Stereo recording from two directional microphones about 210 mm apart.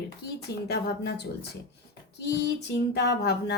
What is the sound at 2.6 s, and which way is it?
Speech, 50° left (ahead or behind).